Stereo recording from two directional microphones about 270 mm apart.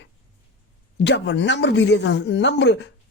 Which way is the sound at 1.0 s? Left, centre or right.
Left.